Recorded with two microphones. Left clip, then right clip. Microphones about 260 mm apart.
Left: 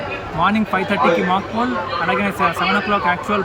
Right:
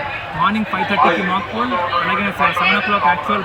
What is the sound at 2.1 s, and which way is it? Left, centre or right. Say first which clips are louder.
Speech: right 1 dB; centre.